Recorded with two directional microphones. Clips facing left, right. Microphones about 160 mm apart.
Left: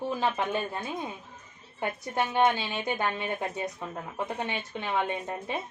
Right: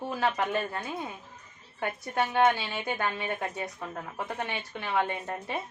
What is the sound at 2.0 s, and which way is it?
Speech, 20° left (ahead or behind).